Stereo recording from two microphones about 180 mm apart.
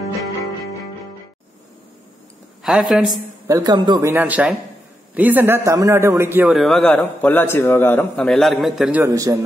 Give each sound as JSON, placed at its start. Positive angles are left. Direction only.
{"t": 2.6, "sound": "a man's voice", "side_deg": 0}
{"t": 3.4, "sound": "speech", "side_deg": -20}
{"t": 4.1, "sound": "a man's voice", "side_deg": -10}
{"t": 6.5, "sound": "a man's voice", "side_deg": 0}
{"t": 9.0, "sound": "a man's voice", "side_deg": -15}